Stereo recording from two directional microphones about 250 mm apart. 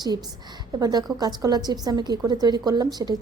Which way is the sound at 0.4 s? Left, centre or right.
Centre.